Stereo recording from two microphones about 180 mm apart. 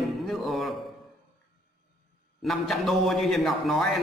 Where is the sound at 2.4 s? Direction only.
Centre (ahead or behind).